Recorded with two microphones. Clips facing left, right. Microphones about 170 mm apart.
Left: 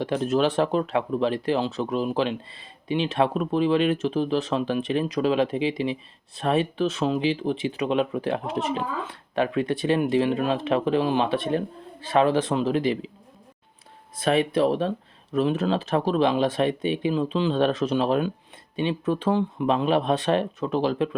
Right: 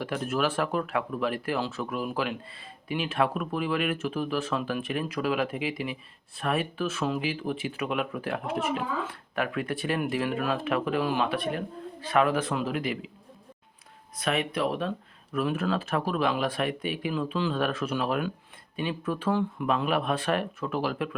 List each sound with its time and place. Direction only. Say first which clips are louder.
0.0 s speech: left 6 dB; 25° left (ahead or behind)
14.2 s speech: left 7 dB; 30° left (ahead or behind)